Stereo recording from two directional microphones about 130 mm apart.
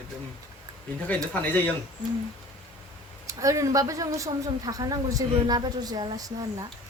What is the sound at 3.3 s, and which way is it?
A woman's voice, 25° right (ahead or behind).